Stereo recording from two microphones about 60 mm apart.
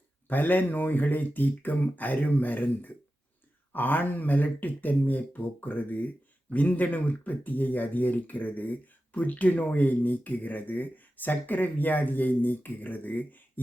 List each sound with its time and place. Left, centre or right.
0.3 s speech: left